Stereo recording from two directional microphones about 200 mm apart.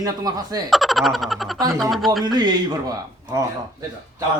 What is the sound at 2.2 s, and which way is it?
Speech, 20° right (ahead or behind).